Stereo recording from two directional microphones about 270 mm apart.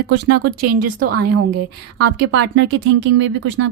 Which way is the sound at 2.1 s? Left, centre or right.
Right.